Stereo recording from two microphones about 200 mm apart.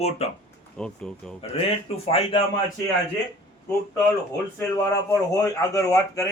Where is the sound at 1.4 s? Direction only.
30° left (ahead or behind).